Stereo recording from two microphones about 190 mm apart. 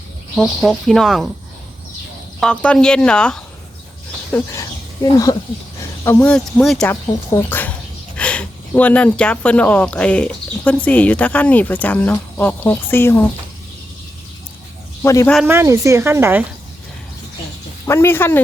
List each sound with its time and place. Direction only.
0.3 s speech: centre (ahead or behind)
2.4 s speech: 5° left (ahead or behind)
15.0 s speech: 15° left (ahead or behind)
15.4 s speech: 15° right (ahead or behind)
17.8 s speech: 10° left (ahead or behind)